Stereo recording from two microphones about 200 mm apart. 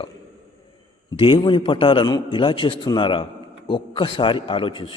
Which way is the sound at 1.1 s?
25° left (ahead or behind).